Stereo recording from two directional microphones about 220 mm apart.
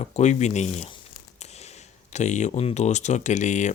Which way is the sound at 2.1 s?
35° left (ahead or behind).